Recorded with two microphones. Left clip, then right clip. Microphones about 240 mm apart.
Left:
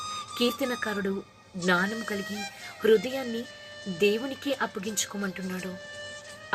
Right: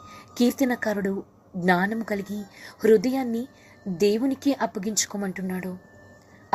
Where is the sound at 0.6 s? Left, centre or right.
Right.